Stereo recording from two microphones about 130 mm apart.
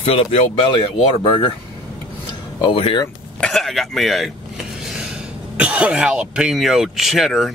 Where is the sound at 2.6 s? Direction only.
40° left (ahead or behind).